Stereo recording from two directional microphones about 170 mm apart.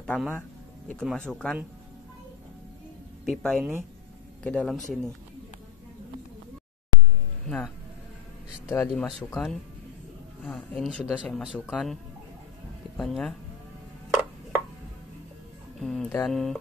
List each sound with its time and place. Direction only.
0.0 s speech: 5° left (ahead or behind)
3.3 s speech: centre (ahead or behind)
7.4 s speech: 5° left (ahead or behind)
8.6 s speech: 15° left (ahead or behind)
15.8 s speech: centre (ahead or behind)